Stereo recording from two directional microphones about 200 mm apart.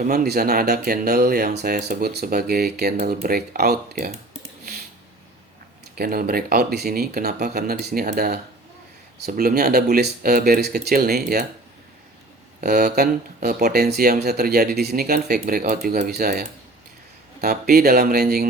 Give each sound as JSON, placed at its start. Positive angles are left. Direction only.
{"t": 0.0, "sound": "speech", "side_deg": -50}
{"t": 6.0, "sound": "speech", "side_deg": -50}
{"t": 12.5, "sound": "speech", "side_deg": -50}